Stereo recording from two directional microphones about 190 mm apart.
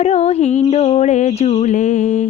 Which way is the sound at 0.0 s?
35° left (ahead or behind).